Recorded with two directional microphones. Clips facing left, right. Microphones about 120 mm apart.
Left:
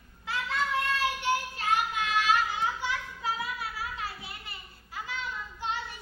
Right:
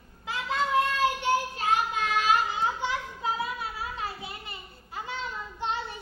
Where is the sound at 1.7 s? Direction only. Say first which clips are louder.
Right 1 dB; 45° right (ahead or behind).